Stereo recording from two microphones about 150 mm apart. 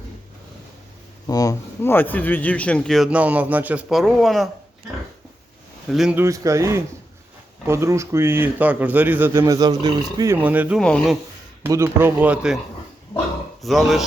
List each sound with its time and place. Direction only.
1.3 s a man's voice: 25° left (ahead or behind); by 3.1 s 5° left (ahead or behind)
3.1 s speech: 10° right (ahead or behind)
5.9 s speech: centre (ahead or behind)
6.1 s speech: 20° right (ahead or behind)
10.3 s speech: 10° right (ahead or behind)
10.8 s speech: 5° left (ahead or behind)
11.6 s speech: 15° right (ahead or behind)
13.6 s speech: centre (ahead or behind)